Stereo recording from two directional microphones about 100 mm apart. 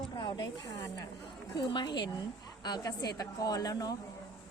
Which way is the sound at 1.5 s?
50° left (ahead or behind).